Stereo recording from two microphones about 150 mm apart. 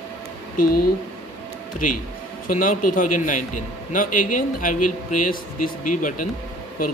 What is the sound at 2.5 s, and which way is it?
Speech, 65° left (ahead or behind).